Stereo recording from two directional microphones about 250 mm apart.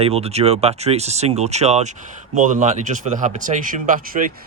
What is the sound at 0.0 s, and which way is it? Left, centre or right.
Speech, right.